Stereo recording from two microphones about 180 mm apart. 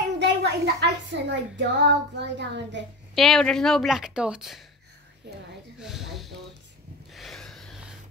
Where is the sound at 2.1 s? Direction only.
70° right (ahead or behind).